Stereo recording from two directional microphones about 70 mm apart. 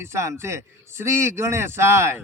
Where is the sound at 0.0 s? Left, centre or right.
Right.